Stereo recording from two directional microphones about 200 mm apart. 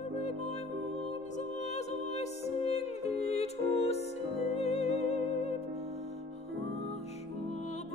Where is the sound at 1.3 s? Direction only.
35° left (ahead or behind).